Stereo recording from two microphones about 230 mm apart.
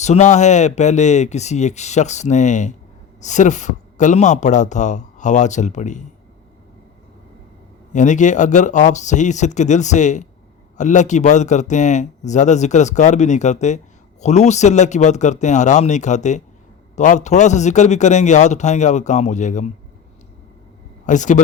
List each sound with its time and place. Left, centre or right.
0.0 s a man's voice: left
7.9 s a man's voice: left
21.1 s a man's voice: left